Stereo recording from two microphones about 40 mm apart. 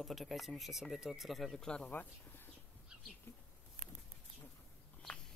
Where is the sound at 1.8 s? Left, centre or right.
Left.